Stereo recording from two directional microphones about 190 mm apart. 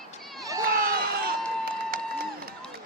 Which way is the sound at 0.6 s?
50° right (ahead or behind).